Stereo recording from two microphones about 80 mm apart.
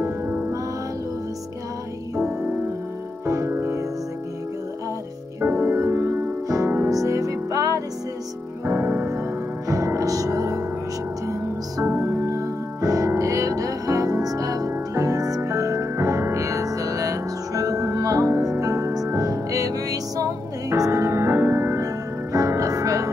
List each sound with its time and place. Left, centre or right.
0.0 s music: right
3.3 s music: right
5.4 s music: right
8.6 s music: right
9.7 s music: right
11.8 s music: right
12.3 s music: right